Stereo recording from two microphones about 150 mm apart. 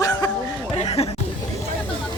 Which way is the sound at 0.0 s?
25° left (ahead or behind).